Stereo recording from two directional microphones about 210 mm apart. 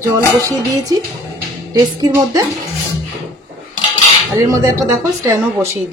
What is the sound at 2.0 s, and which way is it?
Speech, 20° right (ahead or behind).